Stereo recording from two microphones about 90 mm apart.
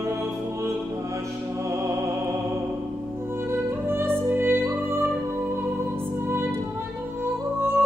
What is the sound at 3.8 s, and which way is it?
Music, 25° right (ahead or behind).